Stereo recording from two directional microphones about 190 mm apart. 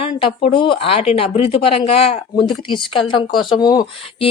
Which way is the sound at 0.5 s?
30° left (ahead or behind).